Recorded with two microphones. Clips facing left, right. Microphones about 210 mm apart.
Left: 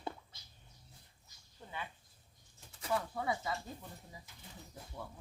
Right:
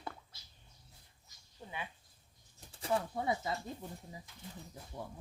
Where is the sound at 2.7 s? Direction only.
30° right (ahead or behind).